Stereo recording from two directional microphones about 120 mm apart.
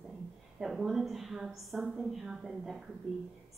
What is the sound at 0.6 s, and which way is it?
A woman's voice, 5° right (ahead or behind).